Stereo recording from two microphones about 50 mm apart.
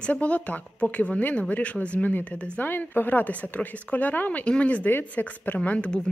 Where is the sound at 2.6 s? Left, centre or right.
Left.